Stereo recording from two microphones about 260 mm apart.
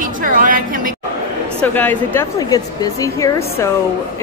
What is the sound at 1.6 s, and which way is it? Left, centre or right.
A woman's voice, centre.